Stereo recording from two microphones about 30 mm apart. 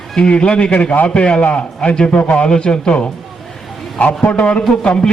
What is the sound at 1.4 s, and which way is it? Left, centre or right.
Speech, left.